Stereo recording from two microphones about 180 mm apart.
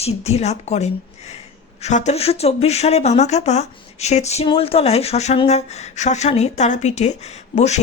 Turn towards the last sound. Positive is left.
turn(degrees=40)  # may be behind; listen again after turning